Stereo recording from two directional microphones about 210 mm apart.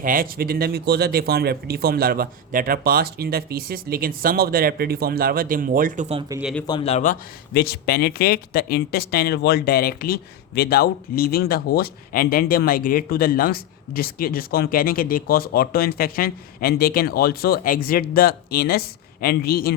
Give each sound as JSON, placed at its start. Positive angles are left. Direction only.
{"t": 0.0, "sound": "speech", "side_deg": -40}
{"t": 6.1, "sound": "speech", "side_deg": -15}
{"t": 6.4, "sound": "a man's voice", "side_deg": 5}
{"t": 6.7, "sound": "a man's voice", "side_deg": 25}